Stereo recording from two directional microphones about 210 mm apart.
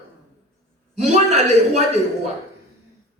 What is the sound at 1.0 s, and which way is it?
Speech, 30° right (ahead or behind).